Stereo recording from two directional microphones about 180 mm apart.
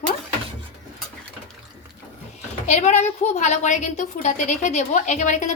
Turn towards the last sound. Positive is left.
turn(degrees=40)  # may be behind; listen again after turning